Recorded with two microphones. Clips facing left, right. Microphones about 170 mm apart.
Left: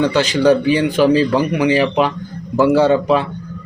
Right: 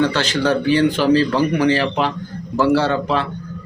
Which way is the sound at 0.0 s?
10° left (ahead or behind).